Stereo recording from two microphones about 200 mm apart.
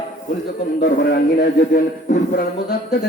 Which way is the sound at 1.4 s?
50° left (ahead or behind).